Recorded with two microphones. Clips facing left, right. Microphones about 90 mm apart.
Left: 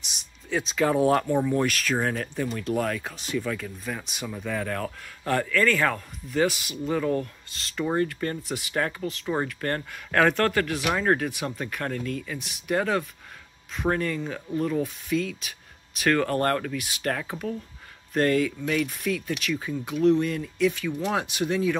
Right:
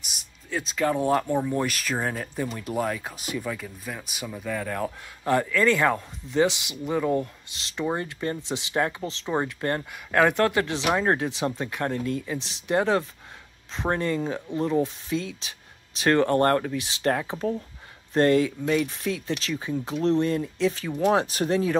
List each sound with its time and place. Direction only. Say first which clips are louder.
0.5 s speech: left 1 dB; centre (ahead or behind)
4.7 s speech: right 2 dB; 20° right (ahead or behind); by 21.7 s 35° right (ahead or behind)